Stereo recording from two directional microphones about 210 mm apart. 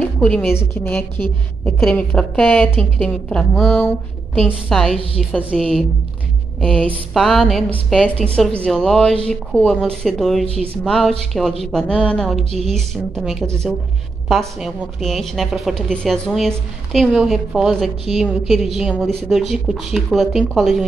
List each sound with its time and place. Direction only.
0.0 s a woman's voice: 5° left (ahead or behind)
10.5 s speech: 30° right (ahead or behind)
10.8 s a woman's voice: 5° left (ahead or behind)